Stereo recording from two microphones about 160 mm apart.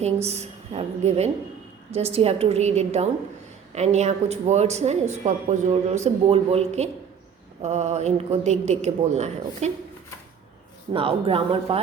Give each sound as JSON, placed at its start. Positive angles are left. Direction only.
{"t": 0.0, "sound": "a woman's voice", "side_deg": -40}
{"t": 10.9, "sound": "a woman's voice", "side_deg": -35}